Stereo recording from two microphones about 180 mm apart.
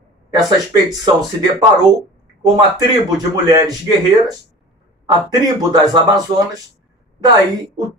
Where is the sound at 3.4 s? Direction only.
20° right (ahead or behind).